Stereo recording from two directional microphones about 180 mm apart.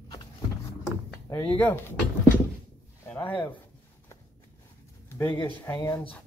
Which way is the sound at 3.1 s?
10° left (ahead or behind).